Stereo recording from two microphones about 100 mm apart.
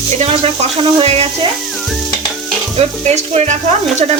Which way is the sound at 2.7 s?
90° right.